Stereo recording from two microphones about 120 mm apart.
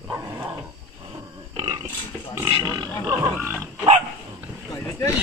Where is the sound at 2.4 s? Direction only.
35° right (ahead or behind).